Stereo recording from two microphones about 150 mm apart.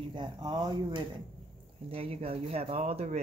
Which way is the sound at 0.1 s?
30° right (ahead or behind).